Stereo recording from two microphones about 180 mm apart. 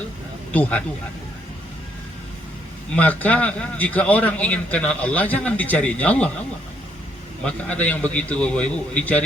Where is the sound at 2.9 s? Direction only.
10° left (ahead or behind).